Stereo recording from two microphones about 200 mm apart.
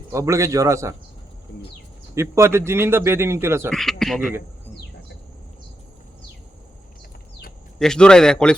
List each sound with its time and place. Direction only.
0.1 s a man's voice: 15° right (ahead or behind)
2.1 s a man's voice: 15° right (ahead or behind)
3.7 s speech: 5° left (ahead or behind)
7.8 s a man's voice: 5° left (ahead or behind)